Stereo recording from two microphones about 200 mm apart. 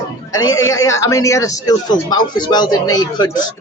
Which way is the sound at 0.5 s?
15° left (ahead or behind).